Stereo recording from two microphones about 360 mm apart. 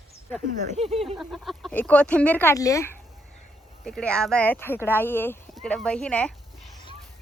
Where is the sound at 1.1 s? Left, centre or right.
Centre.